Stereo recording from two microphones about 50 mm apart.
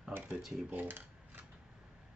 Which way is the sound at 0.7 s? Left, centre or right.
Right.